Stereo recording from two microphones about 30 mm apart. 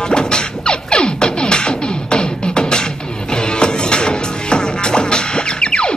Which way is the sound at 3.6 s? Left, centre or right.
Left.